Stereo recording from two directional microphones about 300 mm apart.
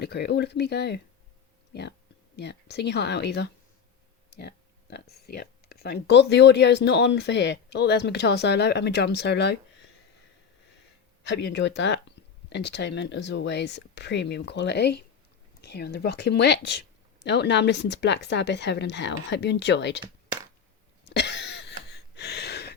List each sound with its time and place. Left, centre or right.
0.0 s speech: left
2.3 s speech: left
4.4 s a sound: left
5.2 s speech: left
11.2 s speech: left
21.1 s a sound: left